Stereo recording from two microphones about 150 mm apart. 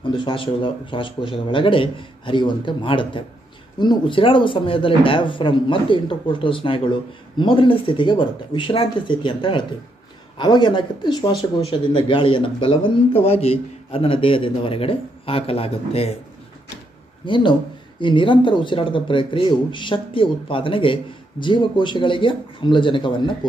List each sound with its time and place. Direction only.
0.2 s speech: 35° left (ahead or behind)
17.3 s speech: 35° left (ahead or behind)